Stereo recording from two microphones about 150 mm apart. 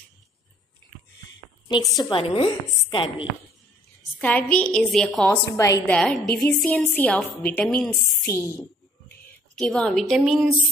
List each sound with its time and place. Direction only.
1.8 s a woman's voice: centre (ahead or behind)
2.0 s a woman's voice: 40° left (ahead or behind)
4.2 s a woman's voice: 10° left (ahead or behind)
5.5 s a woman's voice: 20° left (ahead or behind)
5.9 s a woman's voice: centre (ahead or behind)
8.3 s a woman's voice: 15° left (ahead or behind)
9.6 s a woman's voice: 5° left (ahead or behind)